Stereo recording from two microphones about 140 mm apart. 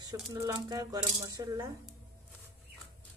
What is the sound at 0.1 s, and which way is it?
Speech, 25° right (ahead or behind).